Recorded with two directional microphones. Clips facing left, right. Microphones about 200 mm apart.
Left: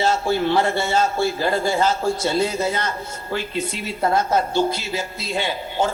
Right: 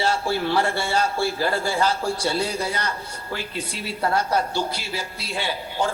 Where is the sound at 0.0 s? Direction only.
20° left (ahead or behind).